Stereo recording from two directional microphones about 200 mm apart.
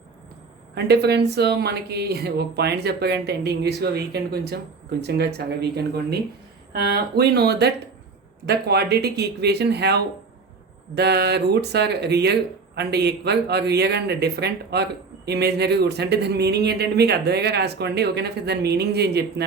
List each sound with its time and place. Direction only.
0.9 s speech: 55° right (ahead or behind)